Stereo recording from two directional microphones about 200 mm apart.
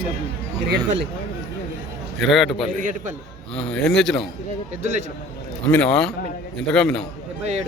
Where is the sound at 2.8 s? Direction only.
40° right (ahead or behind).